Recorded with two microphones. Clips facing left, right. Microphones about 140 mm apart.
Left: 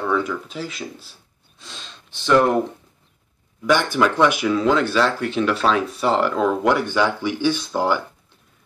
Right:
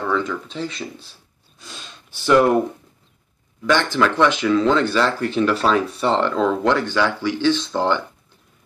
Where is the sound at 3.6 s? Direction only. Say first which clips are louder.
Even; 10° left (ahead or behind).